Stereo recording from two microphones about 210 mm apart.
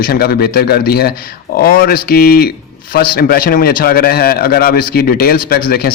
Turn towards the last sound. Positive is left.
turn(degrees=45)  # may be behind; listen again after turning